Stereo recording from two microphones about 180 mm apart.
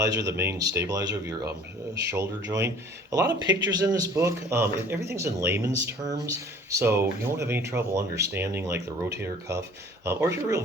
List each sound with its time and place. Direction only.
0.2 s speech: 15° right (ahead or behind)
2.1 s speech: 15° right (ahead or behind)